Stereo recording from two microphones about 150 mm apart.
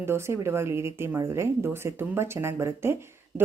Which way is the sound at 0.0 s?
15° right (ahead or behind).